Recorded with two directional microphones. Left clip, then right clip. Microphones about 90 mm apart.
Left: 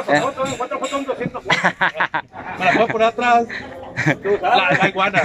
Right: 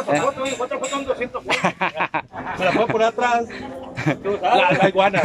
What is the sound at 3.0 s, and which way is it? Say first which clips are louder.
Speech: left 5 dB; 35° right (ahead or behind).